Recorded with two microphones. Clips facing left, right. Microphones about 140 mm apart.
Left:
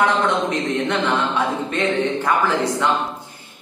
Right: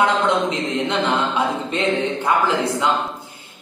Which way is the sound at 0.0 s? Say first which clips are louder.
Right 1 dB; 20° right (ahead or behind).